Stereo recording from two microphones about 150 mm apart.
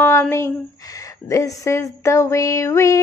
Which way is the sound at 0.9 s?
20° left (ahead or behind).